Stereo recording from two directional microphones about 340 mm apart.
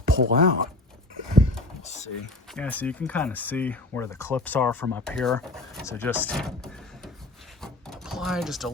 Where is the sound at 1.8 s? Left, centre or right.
Centre.